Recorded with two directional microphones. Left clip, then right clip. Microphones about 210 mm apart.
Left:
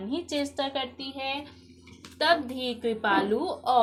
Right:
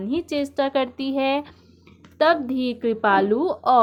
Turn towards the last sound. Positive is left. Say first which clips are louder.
# right 7 dB
turn(degrees=-35)  # may be behind; listen again after turning